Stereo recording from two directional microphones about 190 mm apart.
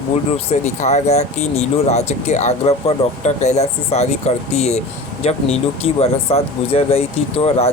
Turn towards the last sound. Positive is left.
turn(degrees=30)  # may be behind; listen again after turning